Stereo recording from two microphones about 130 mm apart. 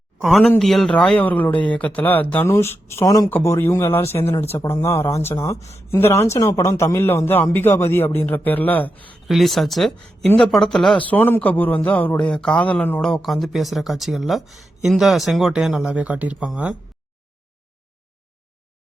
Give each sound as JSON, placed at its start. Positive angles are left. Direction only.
{"t": 0.2, "sound": "a man's voice", "side_deg": 0}
{"t": 9.2, "sound": "a man's voice", "side_deg": 0}